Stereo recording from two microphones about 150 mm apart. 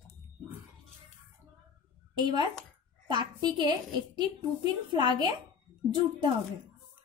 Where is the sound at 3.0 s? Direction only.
30° right (ahead or behind).